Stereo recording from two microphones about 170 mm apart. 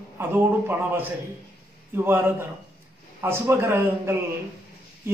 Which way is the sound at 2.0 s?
15° right (ahead or behind).